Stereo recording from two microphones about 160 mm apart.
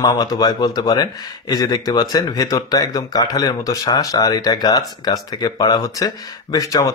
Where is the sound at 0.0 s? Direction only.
25° left (ahead or behind).